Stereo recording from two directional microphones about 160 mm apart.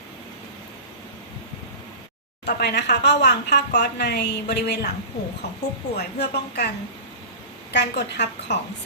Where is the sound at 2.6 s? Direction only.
90° left.